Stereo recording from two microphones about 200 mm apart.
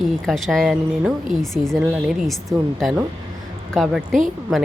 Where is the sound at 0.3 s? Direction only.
Centre (ahead or behind).